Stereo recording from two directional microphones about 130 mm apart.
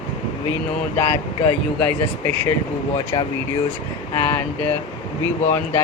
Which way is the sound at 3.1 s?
35° left (ahead or behind).